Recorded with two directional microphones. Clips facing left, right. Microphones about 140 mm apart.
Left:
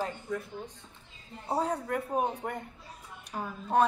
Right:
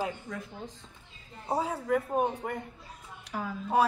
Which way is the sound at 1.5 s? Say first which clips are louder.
Right 2 dB; 5° right (ahead or behind).